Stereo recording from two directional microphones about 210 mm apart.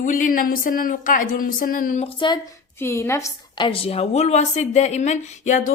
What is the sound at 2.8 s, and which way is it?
A woman's voice, 15° left (ahead or behind).